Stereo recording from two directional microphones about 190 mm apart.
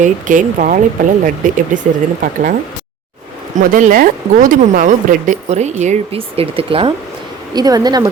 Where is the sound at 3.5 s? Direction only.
45° right (ahead or behind).